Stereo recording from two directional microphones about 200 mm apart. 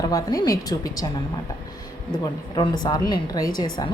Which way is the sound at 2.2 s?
20° left (ahead or behind).